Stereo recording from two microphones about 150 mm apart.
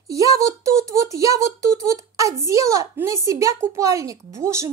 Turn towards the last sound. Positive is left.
turn(degrees=-20)  # may be behind; listen again after turning